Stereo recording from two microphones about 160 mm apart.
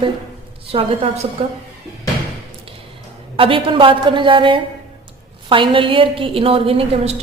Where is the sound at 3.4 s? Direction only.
35° right (ahead or behind).